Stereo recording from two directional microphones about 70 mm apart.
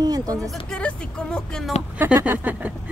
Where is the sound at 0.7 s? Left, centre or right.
Centre.